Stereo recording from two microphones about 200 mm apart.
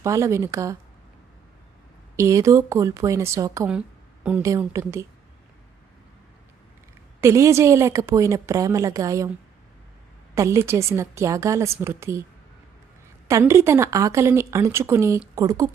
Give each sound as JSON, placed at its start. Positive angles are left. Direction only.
{"t": 0.0, "sound": "a woman's voice", "side_deg": -15}
{"t": 2.1, "sound": "a woman's voice", "side_deg": -15}
{"t": 7.2, "sound": "a woman's voice", "side_deg": -15}
{"t": 10.3, "sound": "a woman's voice", "side_deg": -15}
{"t": 13.2, "sound": "a woman's voice", "side_deg": -15}